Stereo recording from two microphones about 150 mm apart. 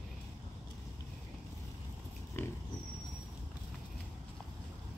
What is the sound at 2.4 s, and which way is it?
Pig, 15° left (ahead or behind).